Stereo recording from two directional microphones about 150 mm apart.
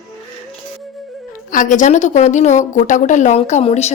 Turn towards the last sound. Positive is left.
turn(degrees=45)  # may be behind; listen again after turning